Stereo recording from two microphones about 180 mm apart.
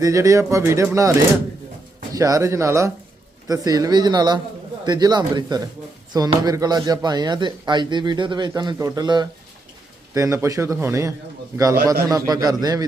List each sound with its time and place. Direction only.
0.0 s speech: 15° right (ahead or behind)
2.1 s speech: 20° right (ahead or behind)